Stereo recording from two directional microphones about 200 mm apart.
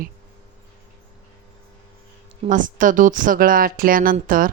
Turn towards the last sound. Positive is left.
turn(degrees=-45)  # may be behind; listen again after turning